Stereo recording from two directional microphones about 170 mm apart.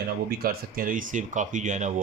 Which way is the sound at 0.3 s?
60° right (ahead or behind).